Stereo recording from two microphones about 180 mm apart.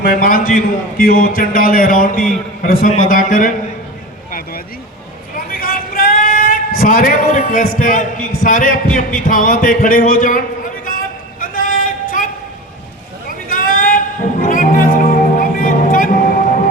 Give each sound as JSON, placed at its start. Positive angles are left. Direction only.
{"t": 0.0, "sound": "a man's voice", "side_deg": 50}
{"t": 4.3, "sound": "vehicle", "side_deg": 55}
{"t": 5.5, "sound": "a sound", "side_deg": 50}
{"t": 9.2, "sound": "a man's voice", "side_deg": 50}
{"t": 10.8, "sound": "a sound", "side_deg": 50}
{"t": 14.4, "sound": "music", "side_deg": 50}